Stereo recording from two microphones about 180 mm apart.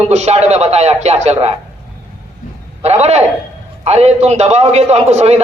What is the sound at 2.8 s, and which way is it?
A man's voice, 35° right (ahead or behind).